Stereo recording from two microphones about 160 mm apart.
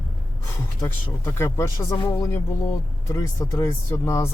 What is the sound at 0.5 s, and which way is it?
Speech, 15° left (ahead or behind).